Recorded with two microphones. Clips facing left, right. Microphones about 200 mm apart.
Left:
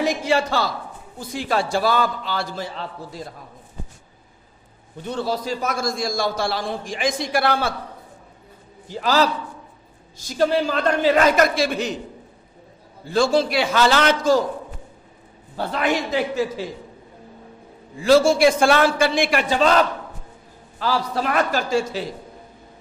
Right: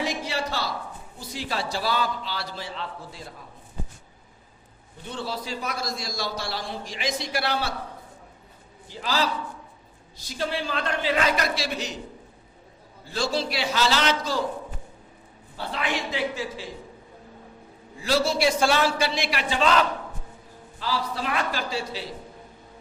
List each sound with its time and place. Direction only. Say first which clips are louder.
1.3 s a man's voice: left 8 dB; 55° left (ahead or behind)
5.1 s a man's voice: left 7 dB; 40° left (ahead or behind)
9.0 s a man's voice: left 7 dB; 45° left (ahead or behind)
13.1 s a man's voice: left 9 dB; 50° left (ahead or behind)
15.5 s a man's voice: left 7 dB; 45° left (ahead or behind)
18.1 s a man's voice: left 8 dB; 50° left (ahead or behind)
20.8 s a man's voice: left 6 dB; 45° left (ahead or behind)